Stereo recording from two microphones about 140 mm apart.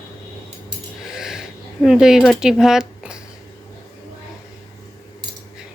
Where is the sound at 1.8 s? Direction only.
5° right (ahead or behind).